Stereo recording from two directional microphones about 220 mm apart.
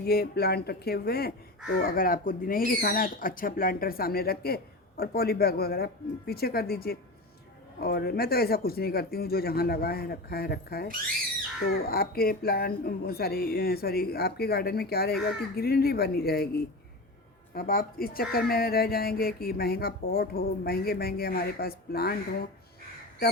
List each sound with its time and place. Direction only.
0.0 s speech: 45° left (ahead or behind)
17.5 s speech: 40° left (ahead or behind)